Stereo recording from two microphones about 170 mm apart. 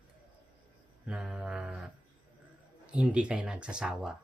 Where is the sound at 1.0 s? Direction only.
5° right (ahead or behind).